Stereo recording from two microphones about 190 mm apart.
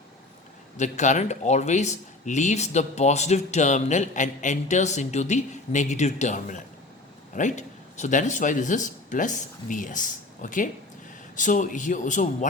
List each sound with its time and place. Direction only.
0.8 s speech: 40° left (ahead or behind)